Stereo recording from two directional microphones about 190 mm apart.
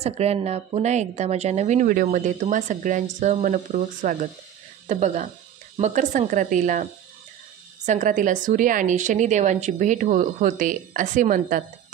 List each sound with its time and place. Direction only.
0.0 s speech: 35° right (ahead or behind)